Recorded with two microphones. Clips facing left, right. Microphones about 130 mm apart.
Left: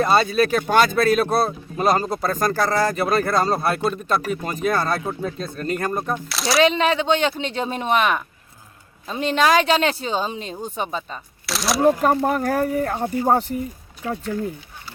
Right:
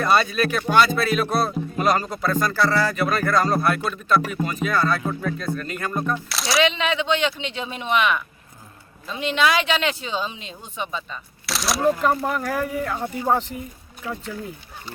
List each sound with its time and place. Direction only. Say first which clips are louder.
0.0 s speech: left 2 dB; 30° left (ahead or behind)
6.2 s speech: left 2 dB; centre (ahead or behind)
6.6 s speech: left 4 dB; 40° left (ahead or behind)
11.4 s speech: left 2 dB; centre (ahead or behind)
11.9 s speech: left 3 dB; 40° left (ahead or behind)